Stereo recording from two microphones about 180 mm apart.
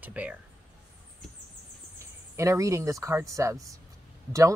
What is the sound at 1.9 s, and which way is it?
Speech, 15° right (ahead or behind).